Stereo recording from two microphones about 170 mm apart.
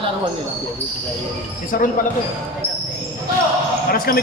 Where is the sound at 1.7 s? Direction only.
55° left (ahead or behind).